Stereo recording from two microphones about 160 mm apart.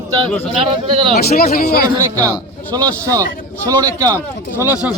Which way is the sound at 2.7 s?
20° right (ahead or behind).